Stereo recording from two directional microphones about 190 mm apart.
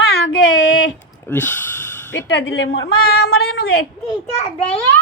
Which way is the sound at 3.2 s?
55° left (ahead or behind).